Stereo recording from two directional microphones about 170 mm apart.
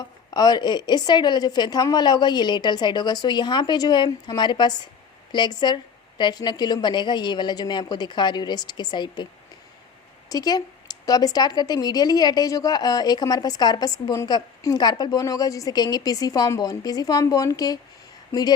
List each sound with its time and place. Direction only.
0.3 s speech: 25° left (ahead or behind)
10.2 s speech: 20° left (ahead or behind)